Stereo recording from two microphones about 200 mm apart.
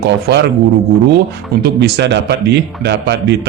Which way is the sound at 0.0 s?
55° right (ahead or behind).